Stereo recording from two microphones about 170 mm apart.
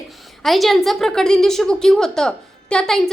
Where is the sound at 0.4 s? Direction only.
Centre (ahead or behind).